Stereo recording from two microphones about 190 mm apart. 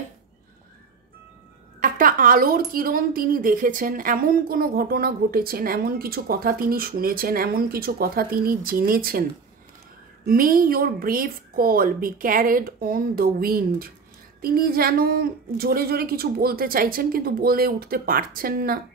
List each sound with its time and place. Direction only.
1.8 s speech: 45° right (ahead or behind)
10.2 s speech: 45° right (ahead or behind)